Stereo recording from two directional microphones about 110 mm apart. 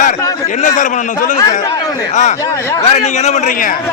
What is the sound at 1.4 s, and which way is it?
Speech, 30° left (ahead or behind).